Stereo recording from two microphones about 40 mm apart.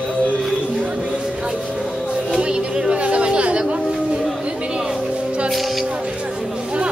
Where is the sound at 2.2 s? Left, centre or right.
Right.